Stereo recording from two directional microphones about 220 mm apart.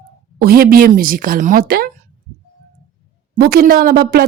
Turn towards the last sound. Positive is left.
turn(degrees=-45)  # may be behind; listen again after turning